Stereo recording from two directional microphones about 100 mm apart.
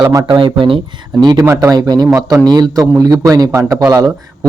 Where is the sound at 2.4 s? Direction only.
45° right (ahead or behind).